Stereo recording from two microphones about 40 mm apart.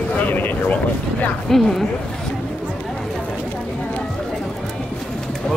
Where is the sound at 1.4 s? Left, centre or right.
Centre.